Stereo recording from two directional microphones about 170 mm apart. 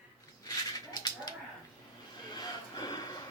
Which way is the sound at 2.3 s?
25° left (ahead or behind).